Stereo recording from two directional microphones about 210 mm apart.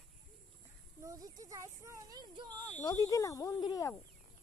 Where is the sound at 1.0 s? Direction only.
15° right (ahead or behind).